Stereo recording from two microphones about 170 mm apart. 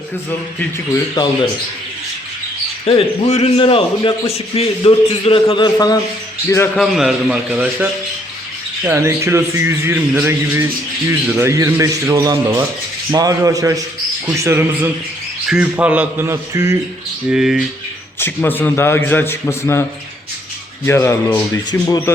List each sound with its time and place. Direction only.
1.2 s speech: 25° left (ahead or behind)
2.8 s a man's voice: 40° left (ahead or behind); by 6.0 s 25° left (ahead or behind)
6.7 s a man's voice: centre (ahead or behind)
17.2 s a man's voice: 5° right (ahead or behind)
18.2 s a man's voice: 10° left (ahead or behind)
20.8 s a man's voice: 15° left (ahead or behind)